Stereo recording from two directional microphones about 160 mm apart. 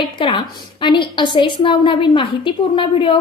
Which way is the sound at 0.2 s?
30° left (ahead or behind).